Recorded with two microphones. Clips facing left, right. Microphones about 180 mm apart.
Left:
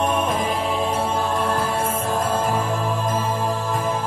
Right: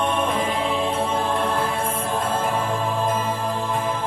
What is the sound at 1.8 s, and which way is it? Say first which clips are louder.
Music: left 2 dB; 45° left (ahead or behind).